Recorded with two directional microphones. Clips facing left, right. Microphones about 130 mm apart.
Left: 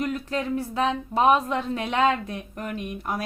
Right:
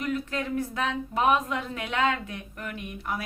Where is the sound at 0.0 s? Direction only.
35° left (ahead or behind).